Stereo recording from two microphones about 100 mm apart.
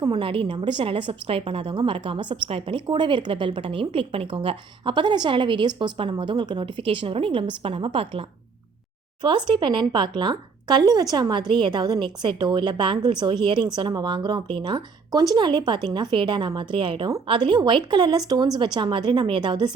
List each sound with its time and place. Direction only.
0.1 s a woman's voice: 65° right (ahead or behind)
9.2 s a woman's voice: 50° right (ahead or behind)